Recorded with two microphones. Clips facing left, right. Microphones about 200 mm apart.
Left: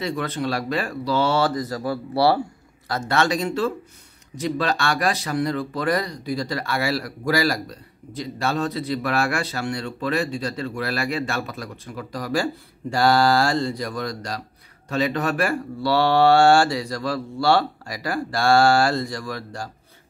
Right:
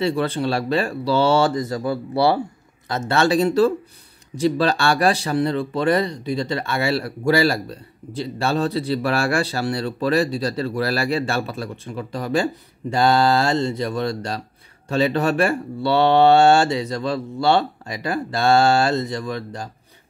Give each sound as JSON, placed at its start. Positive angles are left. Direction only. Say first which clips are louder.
{"t": 0.0, "sound": "speech", "louder": "right 5 dB", "side_deg": -30}